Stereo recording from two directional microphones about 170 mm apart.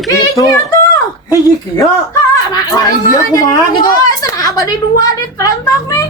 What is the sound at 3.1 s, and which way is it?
A woman's voice, 20° left (ahead or behind).